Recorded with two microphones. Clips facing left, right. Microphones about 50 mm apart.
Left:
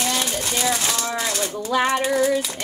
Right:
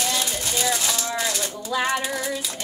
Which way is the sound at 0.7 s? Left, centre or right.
Left.